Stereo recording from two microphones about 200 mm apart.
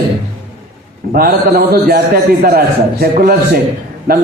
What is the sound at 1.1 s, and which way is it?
A man's voice, 50° right (ahead or behind).